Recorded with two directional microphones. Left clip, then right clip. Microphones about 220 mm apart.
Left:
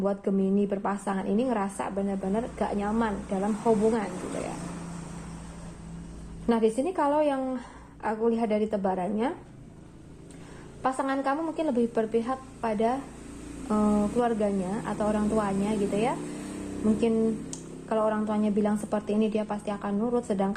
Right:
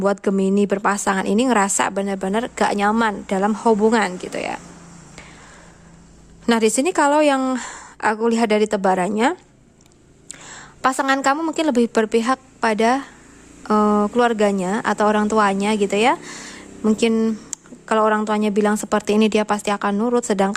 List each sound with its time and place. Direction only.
0.0 s a woman's voice: 55° right (ahead or behind)
6.4 s a woman's voice: 50° right (ahead or behind)
10.8 s speech: 55° right (ahead or behind)
13.7 s speech: 65° right (ahead or behind)